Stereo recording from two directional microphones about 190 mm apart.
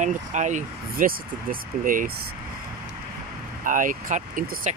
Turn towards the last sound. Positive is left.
turn(degrees=-40)  # may be behind; listen again after turning